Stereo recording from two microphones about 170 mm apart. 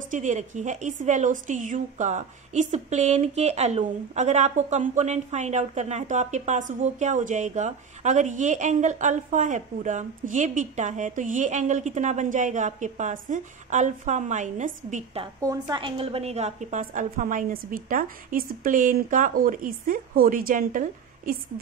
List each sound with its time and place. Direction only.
0.1 s a woman's voice: 45° right (ahead or behind)
15.4 s a woman's voice: 20° right (ahead or behind); by 20.8 s 55° right (ahead or behind)